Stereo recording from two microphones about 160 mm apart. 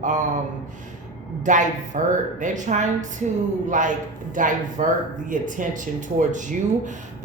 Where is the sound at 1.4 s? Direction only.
55° right (ahead or behind).